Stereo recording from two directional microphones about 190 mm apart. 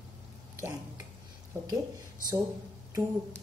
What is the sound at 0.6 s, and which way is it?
Speech, 15° right (ahead or behind).